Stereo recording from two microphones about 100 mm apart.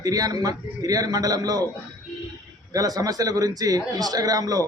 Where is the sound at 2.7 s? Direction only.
35° right (ahead or behind).